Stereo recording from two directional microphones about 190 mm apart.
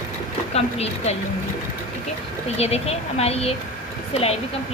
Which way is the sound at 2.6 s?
35° left (ahead or behind).